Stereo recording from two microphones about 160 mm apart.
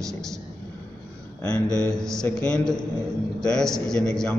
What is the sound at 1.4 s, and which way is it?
A man's voice, 5° left (ahead or behind).